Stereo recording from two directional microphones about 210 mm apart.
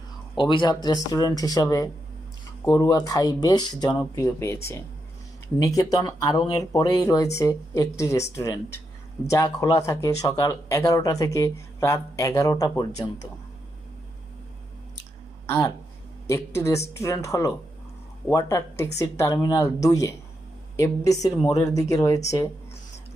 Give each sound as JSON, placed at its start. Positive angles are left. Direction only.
{"t": 0.3, "sound": "speech", "side_deg": 20}
{"t": 15.4, "sound": "speech", "side_deg": 15}